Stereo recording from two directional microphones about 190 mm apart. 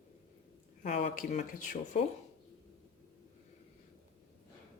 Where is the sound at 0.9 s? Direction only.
35° left (ahead or behind).